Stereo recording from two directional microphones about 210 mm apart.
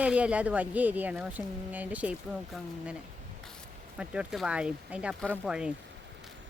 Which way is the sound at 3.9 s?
5° right (ahead or behind).